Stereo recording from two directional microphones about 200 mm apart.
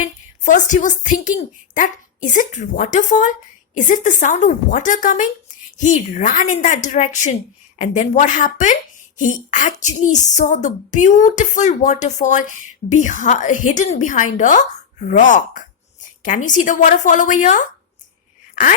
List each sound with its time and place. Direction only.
0.0 s a woman's voice: 40° left (ahead or behind)